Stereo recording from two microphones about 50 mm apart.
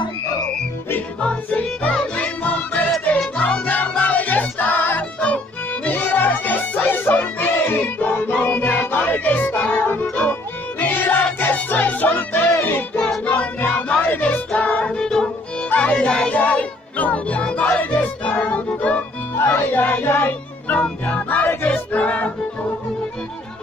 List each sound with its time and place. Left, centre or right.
1.2 s yodeling: left
2.1 s music: left
5.2 s music: left
13.2 s music: left
13.6 s a sound: left
14.2 s music: left
14.9 s music: centre
16.3 s music: left
19.3 s music: left